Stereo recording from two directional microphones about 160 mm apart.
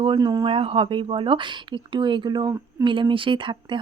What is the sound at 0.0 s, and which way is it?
Speech, 30° right (ahead or behind).